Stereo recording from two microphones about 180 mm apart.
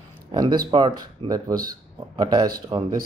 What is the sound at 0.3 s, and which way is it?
Speech, 25° right (ahead or behind).